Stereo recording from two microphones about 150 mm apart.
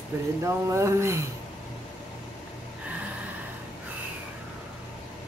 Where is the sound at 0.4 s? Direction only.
20° right (ahead or behind).